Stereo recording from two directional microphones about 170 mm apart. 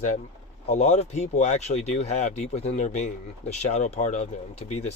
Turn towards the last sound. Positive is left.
turn(degrees=40)  # may be behind; listen again after turning